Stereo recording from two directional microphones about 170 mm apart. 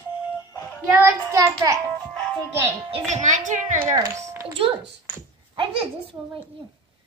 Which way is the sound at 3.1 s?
45° right (ahead or behind).